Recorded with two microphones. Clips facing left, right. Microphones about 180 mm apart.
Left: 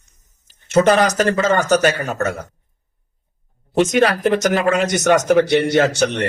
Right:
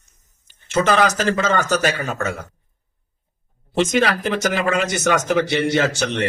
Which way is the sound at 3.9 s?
40° left (ahead or behind).